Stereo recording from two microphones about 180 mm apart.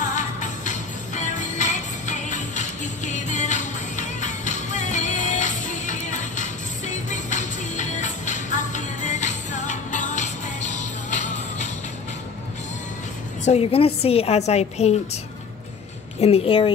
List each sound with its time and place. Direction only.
0.0 s music: 45° left (ahead or behind)
13.5 s a woman's voice: 30° left (ahead or behind)
16.2 s a woman's voice: 35° left (ahead or behind)